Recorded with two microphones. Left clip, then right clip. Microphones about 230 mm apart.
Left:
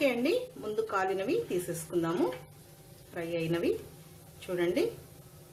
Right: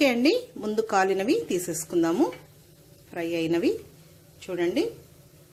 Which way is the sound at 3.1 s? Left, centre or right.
Right.